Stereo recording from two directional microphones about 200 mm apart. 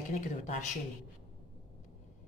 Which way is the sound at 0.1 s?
35° left (ahead or behind).